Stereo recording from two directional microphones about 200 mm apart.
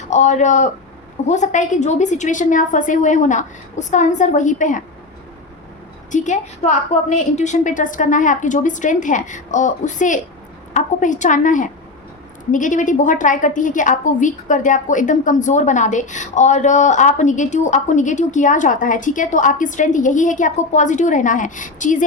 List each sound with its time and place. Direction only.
0.1 s a woman's voice: 35° left (ahead or behind)
6.1 s a woman's voice: 40° left (ahead or behind)